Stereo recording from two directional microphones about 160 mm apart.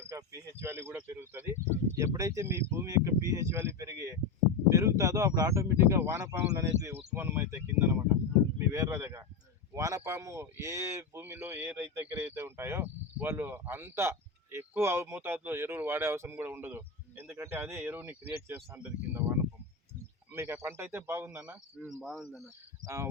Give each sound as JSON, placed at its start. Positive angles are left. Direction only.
{"t": 0.6, "sound": "speech", "side_deg": -15}
{"t": 20.3, "sound": "speech", "side_deg": -15}
{"t": 22.8, "sound": "cricket", "side_deg": -20}